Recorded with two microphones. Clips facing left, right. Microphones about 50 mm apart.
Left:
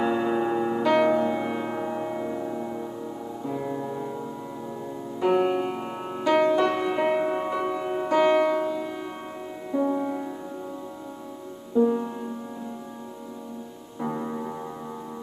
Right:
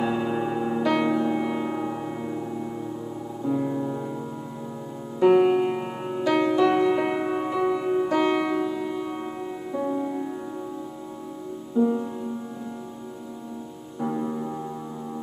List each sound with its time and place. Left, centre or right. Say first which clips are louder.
0.0 s music: left 1 dB; centre
5.2 s music: right 5 dB; centre
9.9 s music: even; centre
11.8 s music: left 1 dB; centre
14.0 s music: right 2 dB; centre